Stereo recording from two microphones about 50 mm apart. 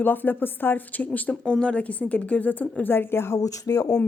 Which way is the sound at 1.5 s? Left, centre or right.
Centre.